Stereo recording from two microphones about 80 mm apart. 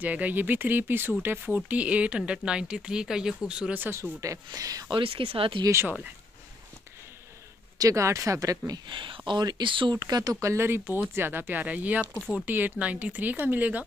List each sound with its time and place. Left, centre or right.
0.0 s speech: right
3.9 s speech: right
4.5 s speech: right
4.9 s speech: right
7.8 s speech: right
8.8 s speech: right
10.4 s speech: right